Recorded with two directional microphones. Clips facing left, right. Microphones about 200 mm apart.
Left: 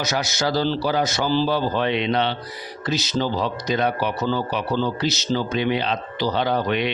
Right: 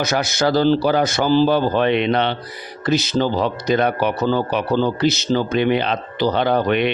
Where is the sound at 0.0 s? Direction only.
55° right (ahead or behind).